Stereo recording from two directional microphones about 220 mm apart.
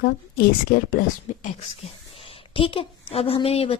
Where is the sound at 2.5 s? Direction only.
25° left (ahead or behind).